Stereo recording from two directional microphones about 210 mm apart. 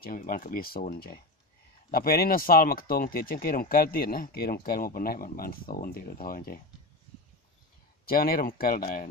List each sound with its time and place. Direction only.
0.0 s speech: 40° left (ahead or behind)
8.0 s speech: 45° left (ahead or behind)